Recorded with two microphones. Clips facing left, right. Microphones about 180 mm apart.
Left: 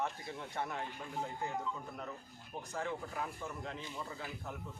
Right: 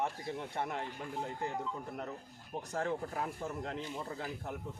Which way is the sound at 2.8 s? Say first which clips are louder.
Right 4 dB; 40° right (ahead or behind).